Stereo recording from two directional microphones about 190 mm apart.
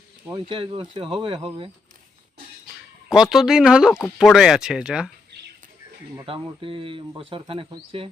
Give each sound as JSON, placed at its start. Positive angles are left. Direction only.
{"t": 0.3, "sound": "speech", "side_deg": -25}
{"t": 3.1, "sound": "speech", "side_deg": 0}
{"t": 6.2, "sound": "speech", "side_deg": -30}